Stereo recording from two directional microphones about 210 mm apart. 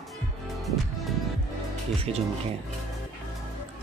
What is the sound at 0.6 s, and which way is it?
Music, centre (ahead or behind).